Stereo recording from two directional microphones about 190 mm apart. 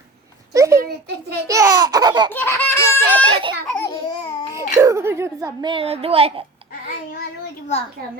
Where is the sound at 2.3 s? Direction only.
10° left (ahead or behind).